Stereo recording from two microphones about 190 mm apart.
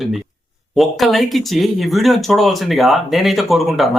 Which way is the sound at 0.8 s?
Centre (ahead or behind).